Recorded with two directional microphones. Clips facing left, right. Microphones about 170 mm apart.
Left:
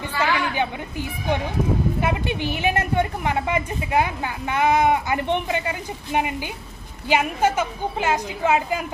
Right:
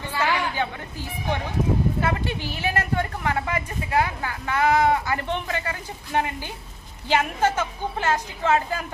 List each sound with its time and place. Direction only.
0.5 s a woman's voice: 15° left (ahead or behind)